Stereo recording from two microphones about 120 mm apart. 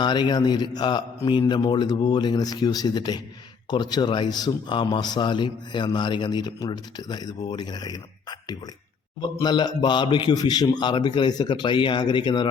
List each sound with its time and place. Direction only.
0.0 s a man's voice: 40° left (ahead or behind)